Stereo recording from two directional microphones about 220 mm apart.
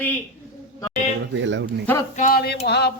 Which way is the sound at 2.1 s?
40° left (ahead or behind).